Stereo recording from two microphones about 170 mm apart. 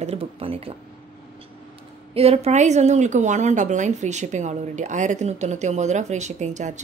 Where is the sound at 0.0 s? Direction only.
35° right (ahead or behind).